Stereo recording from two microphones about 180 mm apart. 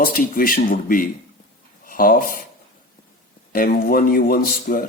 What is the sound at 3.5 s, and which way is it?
A man's voice, 55° left (ahead or behind).